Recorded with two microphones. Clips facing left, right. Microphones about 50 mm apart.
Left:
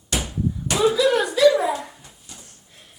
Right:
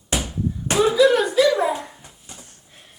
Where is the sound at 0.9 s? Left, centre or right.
Centre.